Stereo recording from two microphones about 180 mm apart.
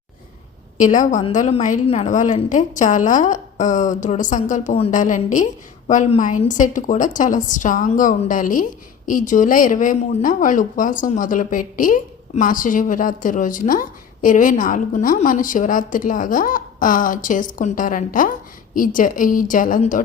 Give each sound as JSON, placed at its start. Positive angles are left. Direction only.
{"t": 0.8, "sound": "speech", "side_deg": 45}